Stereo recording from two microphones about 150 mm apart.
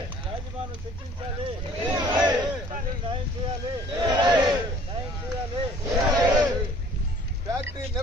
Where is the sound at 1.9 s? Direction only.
30° right (ahead or behind).